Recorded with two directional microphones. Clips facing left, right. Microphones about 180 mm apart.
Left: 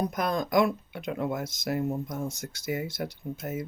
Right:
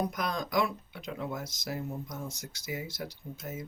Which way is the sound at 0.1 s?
50° left (ahead or behind).